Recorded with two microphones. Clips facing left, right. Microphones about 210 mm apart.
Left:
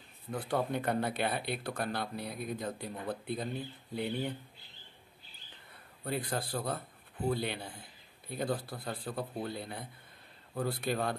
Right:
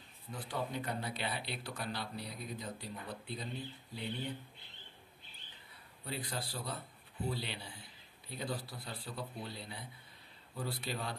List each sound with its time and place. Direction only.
0.3 s speech: 55° left (ahead or behind)
6.0 s speech: 50° left (ahead or behind)